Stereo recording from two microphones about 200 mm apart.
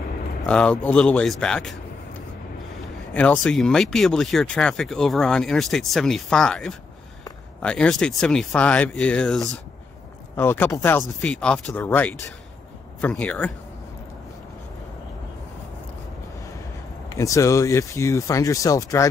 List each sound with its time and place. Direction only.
0.5 s speech: 5° left (ahead or behind)
3.1 s speech: 5° left (ahead or behind)
17.1 s speech: 15° left (ahead or behind)